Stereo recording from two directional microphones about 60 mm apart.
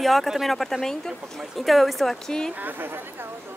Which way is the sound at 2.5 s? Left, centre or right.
Right.